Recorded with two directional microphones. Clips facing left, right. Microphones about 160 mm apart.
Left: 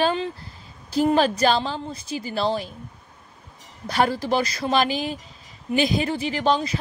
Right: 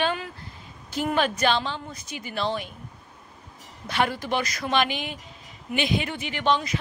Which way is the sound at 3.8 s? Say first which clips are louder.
Left 4 dB; 35° left (ahead or behind).